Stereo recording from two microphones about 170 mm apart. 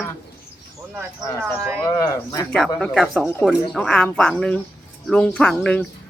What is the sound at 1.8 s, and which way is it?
Speech, 15° left (ahead or behind).